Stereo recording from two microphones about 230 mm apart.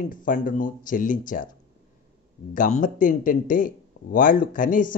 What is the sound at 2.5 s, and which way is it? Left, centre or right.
Speech, left.